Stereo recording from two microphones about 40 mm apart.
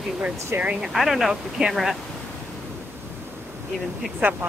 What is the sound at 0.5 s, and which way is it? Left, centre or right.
Speech, right.